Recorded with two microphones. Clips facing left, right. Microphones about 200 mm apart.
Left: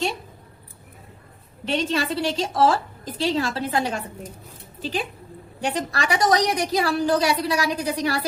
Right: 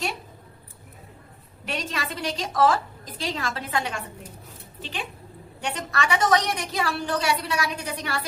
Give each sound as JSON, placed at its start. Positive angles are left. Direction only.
{"t": 1.6, "sound": "a woman's voice", "side_deg": 30}